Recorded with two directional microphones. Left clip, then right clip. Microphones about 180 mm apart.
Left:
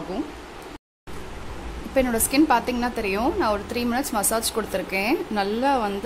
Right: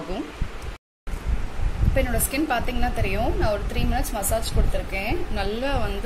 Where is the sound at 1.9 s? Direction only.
30° left (ahead or behind).